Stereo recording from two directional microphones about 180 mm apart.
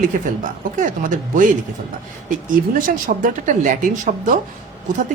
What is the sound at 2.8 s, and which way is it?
Speech, 50° right (ahead or behind).